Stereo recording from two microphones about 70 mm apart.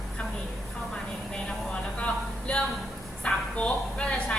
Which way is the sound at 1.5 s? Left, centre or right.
Centre.